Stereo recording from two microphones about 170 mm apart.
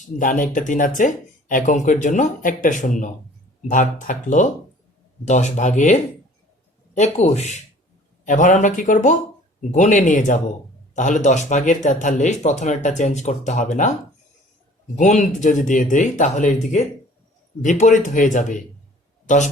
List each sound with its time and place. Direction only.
0.0 s speech: 50° left (ahead or behind)
14.9 s speech: 45° left (ahead or behind)